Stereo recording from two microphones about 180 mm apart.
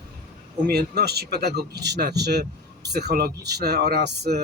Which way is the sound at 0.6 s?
60° right (ahead or behind).